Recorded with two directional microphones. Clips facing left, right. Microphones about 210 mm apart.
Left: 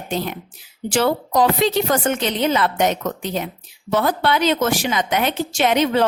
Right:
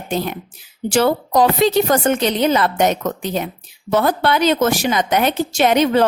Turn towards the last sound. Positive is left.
turn(degrees=-40)  # may be behind; listen again after turning